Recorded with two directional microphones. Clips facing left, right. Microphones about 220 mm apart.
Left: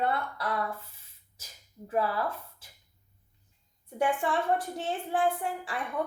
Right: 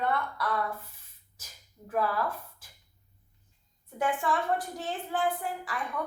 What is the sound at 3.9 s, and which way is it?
A woman's voice, 25° left (ahead or behind).